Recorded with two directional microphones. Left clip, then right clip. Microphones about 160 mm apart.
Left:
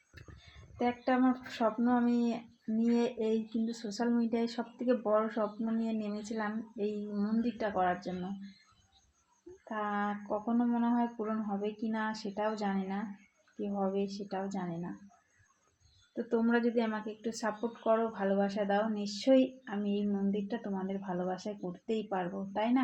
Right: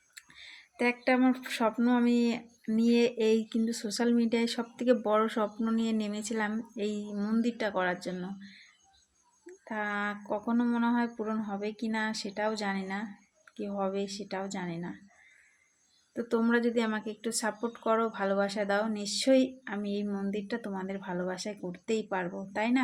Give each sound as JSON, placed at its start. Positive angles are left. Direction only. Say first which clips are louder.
{"t": 1.0, "sound": "speech", "louder": "right 2 dB", "side_deg": -45}
{"t": 9.6, "sound": "speech", "louder": "right 2 dB", "side_deg": -30}
{"t": 16.1, "sound": "speech", "louder": "right 2 dB", "side_deg": -35}
{"t": 21.6, "sound": "speech", "louder": "right 3 dB", "side_deg": -15}
{"t": 21.9, "sound": "speech", "louder": "right 3 dB", "side_deg": -35}